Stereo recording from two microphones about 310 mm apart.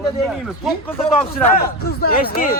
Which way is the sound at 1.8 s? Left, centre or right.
Left.